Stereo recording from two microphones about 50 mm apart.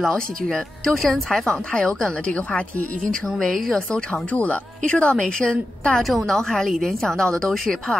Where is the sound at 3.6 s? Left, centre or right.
Centre.